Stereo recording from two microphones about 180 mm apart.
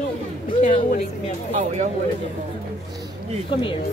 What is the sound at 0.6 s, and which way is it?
Speech, 45° left (ahead or behind).